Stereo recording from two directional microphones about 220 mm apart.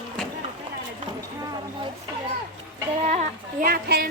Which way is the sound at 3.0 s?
30° right (ahead or behind).